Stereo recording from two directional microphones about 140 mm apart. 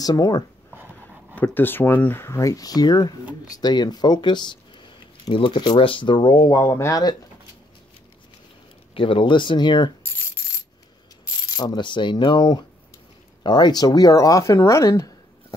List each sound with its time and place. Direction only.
0.0 s speech: 25° left (ahead or behind)
0.9 s speech: 10° left (ahead or behind)
8.9 s coin: 40° left (ahead or behind)
11.5 s coin: 30° left (ahead or behind)
13.4 s speech: 30° left (ahead or behind)